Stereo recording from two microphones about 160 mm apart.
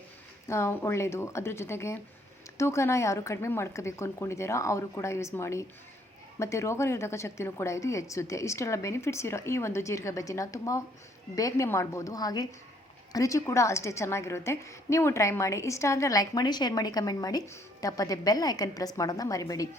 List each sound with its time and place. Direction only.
0.4 s a woman's voice: 15° left (ahead or behind)